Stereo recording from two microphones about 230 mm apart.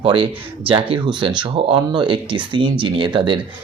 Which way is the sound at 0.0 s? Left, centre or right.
Right.